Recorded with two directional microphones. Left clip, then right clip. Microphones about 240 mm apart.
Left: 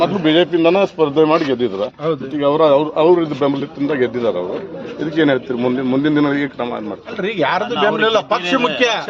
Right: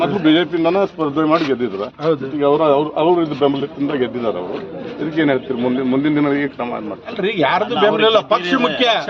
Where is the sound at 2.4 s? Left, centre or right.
Left.